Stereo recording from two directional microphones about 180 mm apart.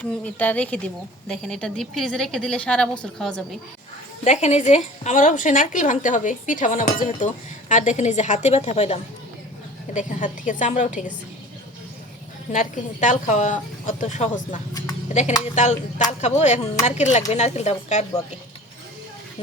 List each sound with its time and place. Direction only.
0.0 s a woman's voice: 5° left (ahead or behind)
4.2 s speech: 40° left (ahead or behind)
12.5 s speech: 45° left (ahead or behind)
14.7 s speech: 20° left (ahead or behind)
15.5 s speech: 40° left (ahead or behind)